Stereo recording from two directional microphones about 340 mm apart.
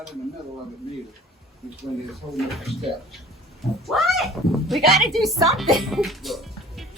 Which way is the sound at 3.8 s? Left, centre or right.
Centre.